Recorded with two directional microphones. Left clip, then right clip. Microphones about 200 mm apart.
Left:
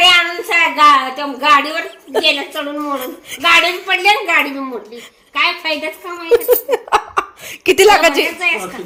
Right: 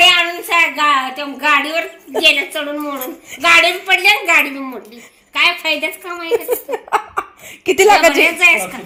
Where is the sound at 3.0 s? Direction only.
5° left (ahead or behind).